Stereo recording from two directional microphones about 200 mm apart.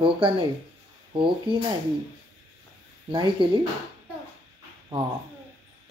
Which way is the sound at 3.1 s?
25° right (ahead or behind).